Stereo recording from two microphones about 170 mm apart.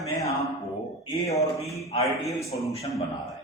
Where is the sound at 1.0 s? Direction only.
20° left (ahead or behind).